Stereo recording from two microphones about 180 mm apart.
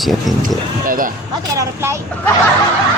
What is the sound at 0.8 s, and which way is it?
Speech, 50° right (ahead or behind).